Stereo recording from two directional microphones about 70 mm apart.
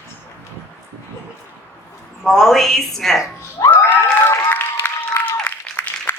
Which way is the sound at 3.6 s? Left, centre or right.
Left.